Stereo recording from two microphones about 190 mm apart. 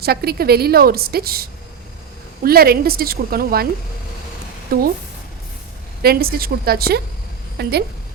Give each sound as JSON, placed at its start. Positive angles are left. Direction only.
{"t": 0.0, "sound": "a woman's voice", "side_deg": -55}
{"t": 4.7, "sound": "a woman's voice", "side_deg": -50}
{"t": 6.0, "sound": "a woman's voice", "side_deg": -55}